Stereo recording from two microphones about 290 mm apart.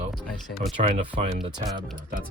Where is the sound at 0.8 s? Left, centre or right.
Right.